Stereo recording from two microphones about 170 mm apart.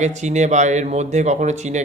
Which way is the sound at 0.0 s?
45° right (ahead or behind).